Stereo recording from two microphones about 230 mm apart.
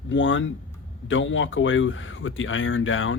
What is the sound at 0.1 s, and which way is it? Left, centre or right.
Speech, left.